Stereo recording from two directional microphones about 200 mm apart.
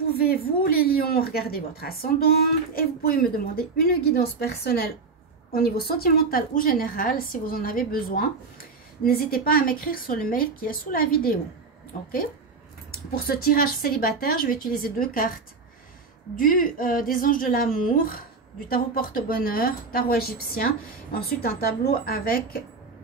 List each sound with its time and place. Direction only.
0.2 s a woman's voice: 50° left (ahead or behind)
12.9 s a woman's voice: 50° left (ahead or behind)